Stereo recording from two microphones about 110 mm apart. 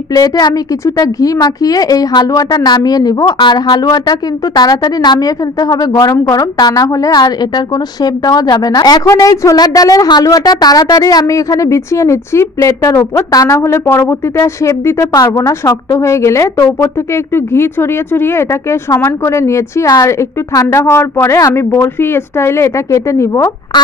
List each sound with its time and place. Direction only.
0.1 s a woman's voice: 35° left (ahead or behind)